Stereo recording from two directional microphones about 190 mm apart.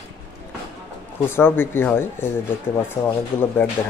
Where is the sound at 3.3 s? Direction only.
10° left (ahead or behind).